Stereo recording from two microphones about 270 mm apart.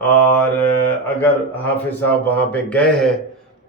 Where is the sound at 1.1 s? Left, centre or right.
Centre.